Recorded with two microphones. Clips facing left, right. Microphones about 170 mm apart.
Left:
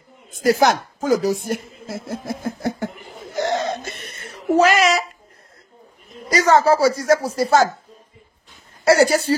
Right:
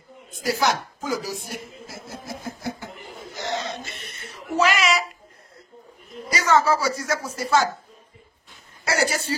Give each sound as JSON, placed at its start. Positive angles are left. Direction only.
{"t": 0.4, "sound": "a woman's voice", "side_deg": 45}
{"t": 3.3, "sound": "a sound", "side_deg": 50}
{"t": 6.3, "sound": "speech", "side_deg": 35}
{"t": 8.8, "sound": "speech", "side_deg": 35}